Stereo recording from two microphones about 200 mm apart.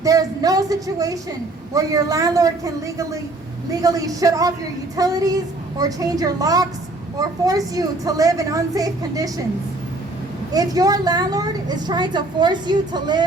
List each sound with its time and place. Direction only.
0.0 s a woman's voice: 15° right (ahead or behind)
10.5 s a woman's voice: 20° right (ahead or behind)